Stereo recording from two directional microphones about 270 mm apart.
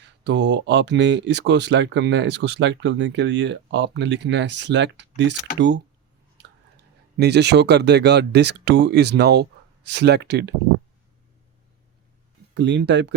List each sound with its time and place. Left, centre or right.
0.0 s speech: right
7.2 s speech: right
12.5 s speech: right